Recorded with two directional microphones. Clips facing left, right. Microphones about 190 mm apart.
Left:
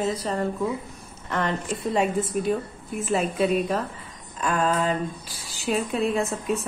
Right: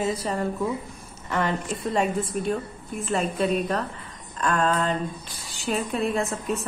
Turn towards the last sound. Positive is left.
turn(degrees=0)  # may be behind; listen again after turning